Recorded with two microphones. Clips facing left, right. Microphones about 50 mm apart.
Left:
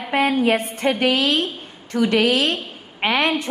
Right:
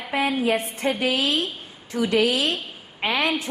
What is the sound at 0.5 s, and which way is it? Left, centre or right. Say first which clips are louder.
Female singing: left 4 dB; left.